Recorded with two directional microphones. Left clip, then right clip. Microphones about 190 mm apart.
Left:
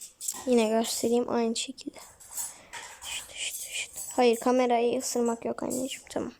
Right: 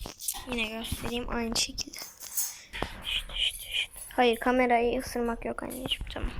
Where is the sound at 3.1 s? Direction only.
25° left (ahead or behind).